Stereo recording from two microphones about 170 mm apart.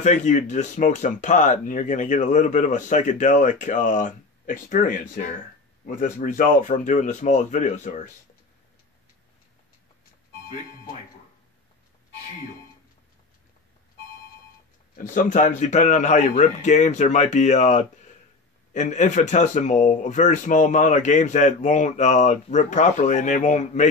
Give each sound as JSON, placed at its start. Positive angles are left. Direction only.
{"t": 0.0, "sound": "speech", "side_deg": 45}
{"t": 15.0, "sound": "speech", "side_deg": 50}